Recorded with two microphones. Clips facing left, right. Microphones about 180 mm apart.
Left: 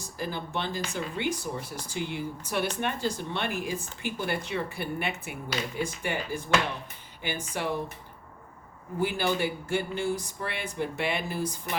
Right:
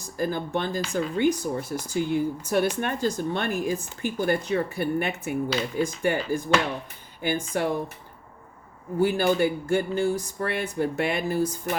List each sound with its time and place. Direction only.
0.2 s speech: 45° right (ahead or behind)
9.0 s speech: 45° right (ahead or behind)